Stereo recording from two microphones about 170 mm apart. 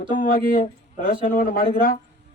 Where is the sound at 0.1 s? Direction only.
55° left (ahead or behind).